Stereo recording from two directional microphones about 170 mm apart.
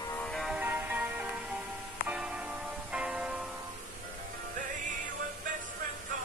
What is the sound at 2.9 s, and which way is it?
Music, 5° right (ahead or behind).